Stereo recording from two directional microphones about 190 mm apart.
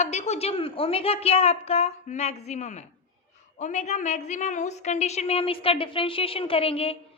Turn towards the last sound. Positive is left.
turn(degrees=30)  # may be behind; listen again after turning